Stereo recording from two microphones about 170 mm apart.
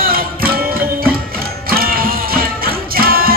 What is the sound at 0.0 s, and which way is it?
Music, 60° right (ahead or behind).